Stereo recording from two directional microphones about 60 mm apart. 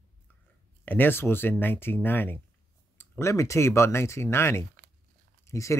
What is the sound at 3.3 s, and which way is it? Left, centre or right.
Speech, left.